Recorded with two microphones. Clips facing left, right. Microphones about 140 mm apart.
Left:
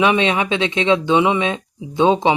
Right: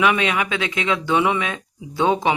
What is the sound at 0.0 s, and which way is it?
Speech, 25° left (ahead or behind).